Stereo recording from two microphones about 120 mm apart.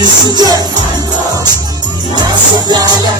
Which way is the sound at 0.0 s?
35° right (ahead or behind).